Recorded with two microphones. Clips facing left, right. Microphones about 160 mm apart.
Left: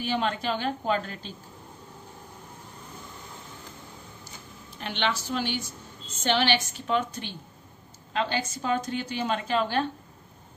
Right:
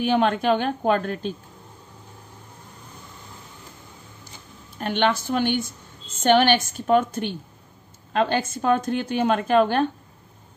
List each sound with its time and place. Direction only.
0.0 s a woman's voice: 55° right (ahead or behind)
4.7 s speech: 50° right (ahead or behind)